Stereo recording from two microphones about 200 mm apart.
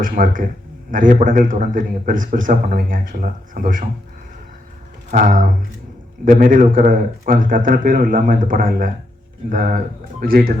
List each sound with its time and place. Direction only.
0.0 s a man's voice: 45° right (ahead or behind)
5.1 s a man's voice: 40° right (ahead or behind)